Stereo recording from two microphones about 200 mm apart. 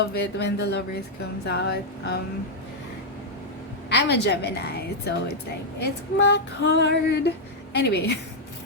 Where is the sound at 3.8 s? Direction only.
60° left (ahead or behind).